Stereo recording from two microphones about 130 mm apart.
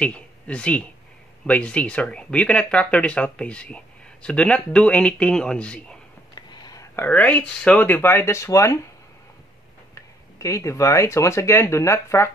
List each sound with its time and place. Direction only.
0.0 s speech: 10° left (ahead or behind)
6.3 s whispering: 30° left (ahead or behind)
7.1 s speech: 10° left (ahead or behind)
9.9 s speech: 25° left (ahead or behind)